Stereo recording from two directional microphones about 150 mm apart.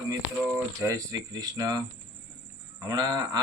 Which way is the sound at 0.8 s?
20° right (ahead or behind).